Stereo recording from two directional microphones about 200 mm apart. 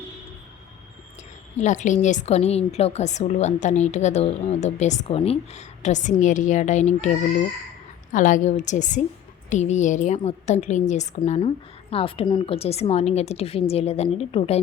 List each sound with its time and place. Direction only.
1.5 s a woman's voice: 35° left (ahead or behind)